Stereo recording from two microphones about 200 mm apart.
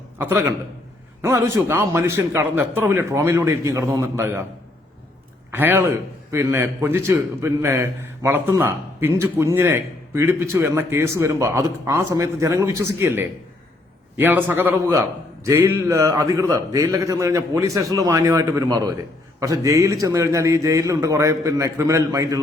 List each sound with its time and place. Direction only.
0.2 s a man's voice: 10° right (ahead or behind)
5.5 s a man's voice: 10° right (ahead or behind)